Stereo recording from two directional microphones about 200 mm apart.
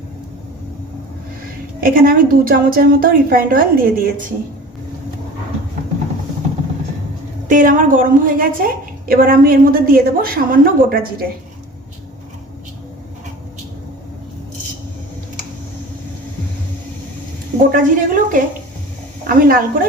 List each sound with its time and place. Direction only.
1.8 s a woman's voice: 45° right (ahead or behind)
7.4 s a woman's voice: 40° right (ahead or behind)
17.7 s a woman's voice: 45° right (ahead or behind)